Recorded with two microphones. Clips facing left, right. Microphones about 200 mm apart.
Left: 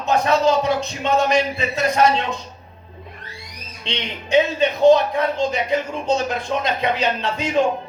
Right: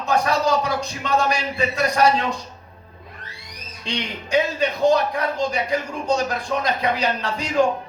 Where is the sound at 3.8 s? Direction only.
25° left (ahead or behind).